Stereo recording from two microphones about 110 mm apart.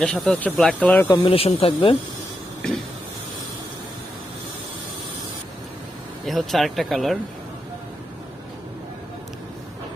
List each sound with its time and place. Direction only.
0.0 s speech: 10° left (ahead or behind)
0.8 s speech: 15° left (ahead or behind)
1.2 s speech: 60° left (ahead or behind)
6.2 s speech: centre (ahead or behind)